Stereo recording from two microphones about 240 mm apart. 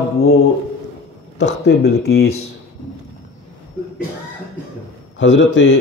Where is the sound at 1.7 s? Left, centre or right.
Left.